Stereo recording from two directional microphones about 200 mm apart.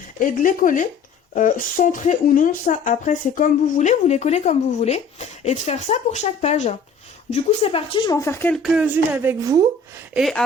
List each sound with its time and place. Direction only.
0.2 s speech: 45° left (ahead or behind); by 8.5 s 10° left (ahead or behind)
8.5 s speech: 5° right (ahead or behind)
10.2 s a sound: centre (ahead or behind)